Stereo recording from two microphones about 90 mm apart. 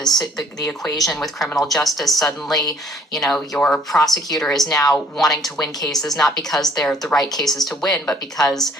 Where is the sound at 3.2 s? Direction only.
Centre (ahead or behind).